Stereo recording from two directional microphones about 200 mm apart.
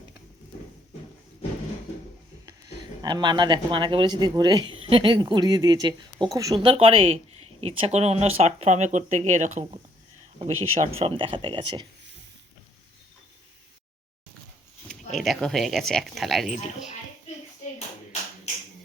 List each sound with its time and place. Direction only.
3.0 s speech: 20° right (ahead or behind)
15.1 s speech: centre (ahead or behind)